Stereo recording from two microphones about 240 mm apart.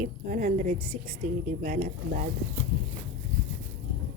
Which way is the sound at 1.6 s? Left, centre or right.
Right.